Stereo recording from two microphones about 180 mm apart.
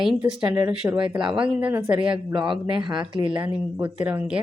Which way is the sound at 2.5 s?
25° right (ahead or behind).